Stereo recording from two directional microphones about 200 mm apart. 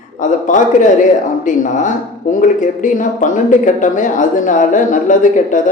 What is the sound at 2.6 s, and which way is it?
Speech, 40° left (ahead or behind).